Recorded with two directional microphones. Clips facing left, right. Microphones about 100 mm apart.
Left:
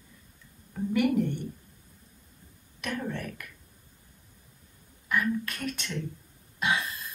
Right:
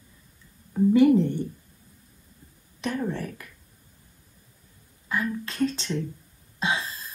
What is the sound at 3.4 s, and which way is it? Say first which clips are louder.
Speech: even; 25° right (ahead or behind).